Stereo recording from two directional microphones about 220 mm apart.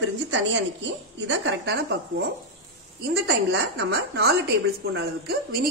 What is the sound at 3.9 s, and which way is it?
A woman's voice, 45° right (ahead or behind).